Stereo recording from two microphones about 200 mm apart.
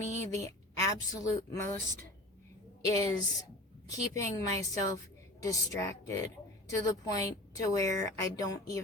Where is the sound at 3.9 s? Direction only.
15° left (ahead or behind).